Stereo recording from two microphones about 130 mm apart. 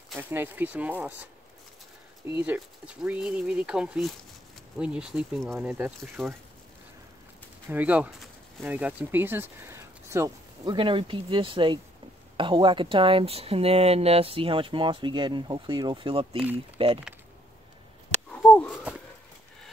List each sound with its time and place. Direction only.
0.2 s speech: 15° right (ahead or behind)
2.4 s speech: 10° right (ahead or behind)
7.7 s speech: 10° right (ahead or behind)
10.6 s speech: 40° right (ahead or behind)
18.3 s a sound: 10° left (ahead or behind)